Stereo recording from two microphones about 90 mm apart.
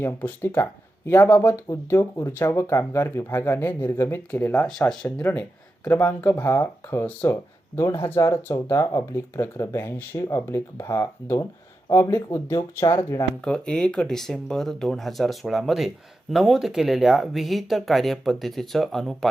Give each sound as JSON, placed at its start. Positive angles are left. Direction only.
{"t": 0.0, "sound": "speech", "side_deg": 25}
{"t": 6.5, "sound": "speech", "side_deg": 35}
{"t": 7.0, "sound": "speech", "side_deg": 25}
{"t": 13.4, "sound": "speech", "side_deg": 10}